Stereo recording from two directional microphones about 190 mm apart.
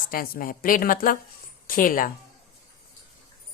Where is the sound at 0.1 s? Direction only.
50° left (ahead or behind).